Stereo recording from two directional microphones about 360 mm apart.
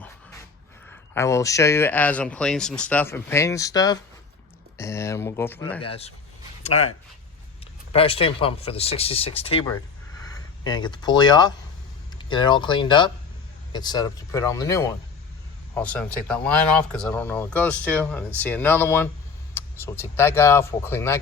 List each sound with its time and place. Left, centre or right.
1.1 s speech: centre
5.8 s speech: centre
10.7 s speech: centre